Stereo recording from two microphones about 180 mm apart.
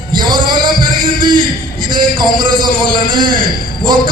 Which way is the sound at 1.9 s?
25° right (ahead or behind).